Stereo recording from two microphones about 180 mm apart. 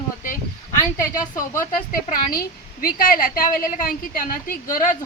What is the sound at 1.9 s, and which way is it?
A woman's voice, 50° left (ahead or behind).